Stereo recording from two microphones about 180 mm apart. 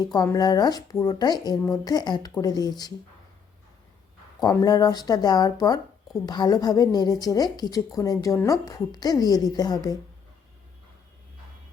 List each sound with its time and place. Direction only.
0.0 s speech: 20° left (ahead or behind)
4.4 s speech: 20° left (ahead or behind)